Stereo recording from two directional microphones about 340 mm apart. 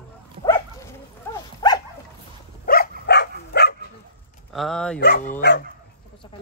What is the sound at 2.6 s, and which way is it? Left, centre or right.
Dog, left.